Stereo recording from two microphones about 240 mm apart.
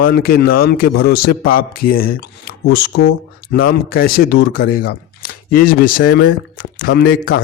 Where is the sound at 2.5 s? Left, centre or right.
Left.